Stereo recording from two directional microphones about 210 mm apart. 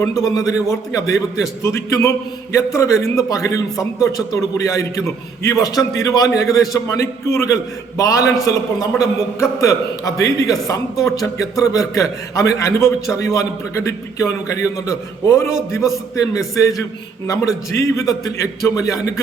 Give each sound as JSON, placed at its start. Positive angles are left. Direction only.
{"t": 0.0, "sound": "a man's voice", "side_deg": 15}